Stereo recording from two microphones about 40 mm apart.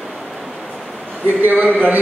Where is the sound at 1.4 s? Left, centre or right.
Right.